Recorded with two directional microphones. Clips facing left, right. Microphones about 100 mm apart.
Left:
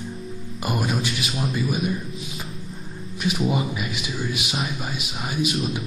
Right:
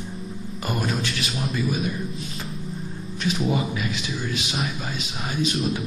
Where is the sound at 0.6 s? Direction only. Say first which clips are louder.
Left 2 dB; 10° left (ahead or behind).